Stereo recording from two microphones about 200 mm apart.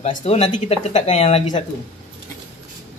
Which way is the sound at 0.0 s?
30° left (ahead or behind).